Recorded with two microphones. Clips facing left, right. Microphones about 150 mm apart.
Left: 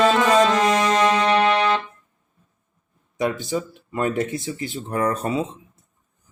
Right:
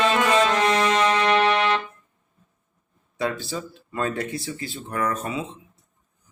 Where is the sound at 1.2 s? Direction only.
30° left (ahead or behind).